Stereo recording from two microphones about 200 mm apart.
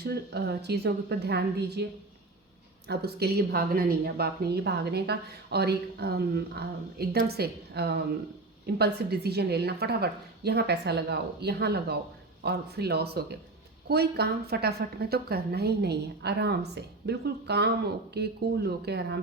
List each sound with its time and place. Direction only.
0.0 s a woman's voice: 55° right (ahead or behind)
2.8 s a woman's voice: 55° right (ahead or behind)